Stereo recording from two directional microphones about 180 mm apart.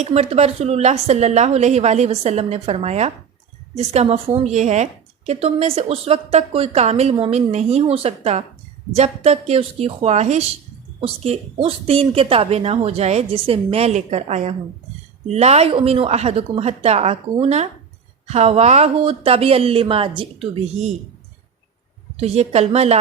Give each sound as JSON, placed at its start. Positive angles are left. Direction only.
{"t": 0.0, "sound": "a woman's voice", "side_deg": -35}
{"t": 22.2, "sound": "a woman's voice", "side_deg": -35}